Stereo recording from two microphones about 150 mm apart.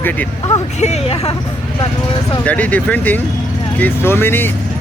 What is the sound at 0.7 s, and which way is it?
Speech, 50° left (ahead or behind).